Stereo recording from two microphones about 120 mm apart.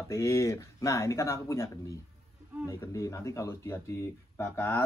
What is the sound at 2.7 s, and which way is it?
A man's voice, 25° left (ahead or behind).